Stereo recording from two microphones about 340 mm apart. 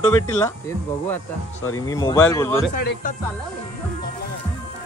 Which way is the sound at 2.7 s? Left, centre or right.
Left.